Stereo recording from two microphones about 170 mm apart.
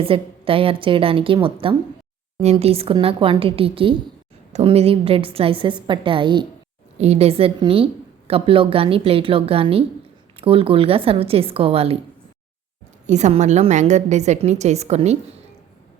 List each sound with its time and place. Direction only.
0.0 s a woman's voice: 35° right (ahead or behind)
13.1 s a woman's voice: 45° right (ahead or behind)